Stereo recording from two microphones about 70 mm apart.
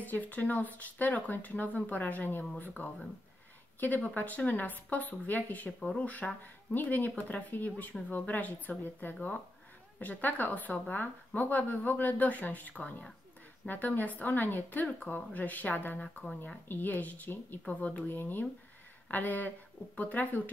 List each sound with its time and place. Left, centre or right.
0.0 s a woman's voice: left